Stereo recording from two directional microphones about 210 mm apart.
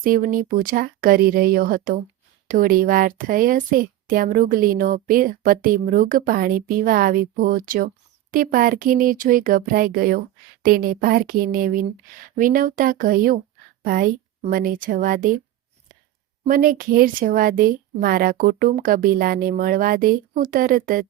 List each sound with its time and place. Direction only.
0.0 s speech: 40° right (ahead or behind)
16.5 s speech: 40° right (ahead or behind)